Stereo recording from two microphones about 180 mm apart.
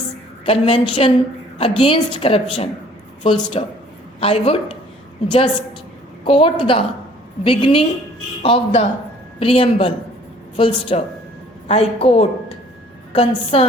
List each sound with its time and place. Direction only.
0.4 s a woman's voice: 30° left (ahead or behind)
6.2 s a woman's voice: 30° left (ahead or behind)